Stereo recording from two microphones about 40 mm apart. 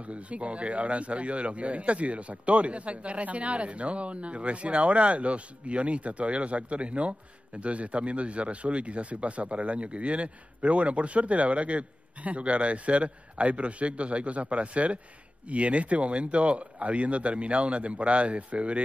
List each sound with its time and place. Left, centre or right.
0.0 s a man's voice: right